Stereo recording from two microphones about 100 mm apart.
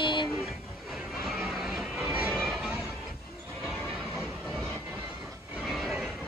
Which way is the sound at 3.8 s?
15° left (ahead or behind).